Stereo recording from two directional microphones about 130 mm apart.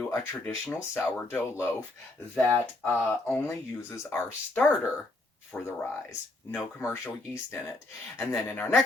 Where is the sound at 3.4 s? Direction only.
20° left (ahead or behind).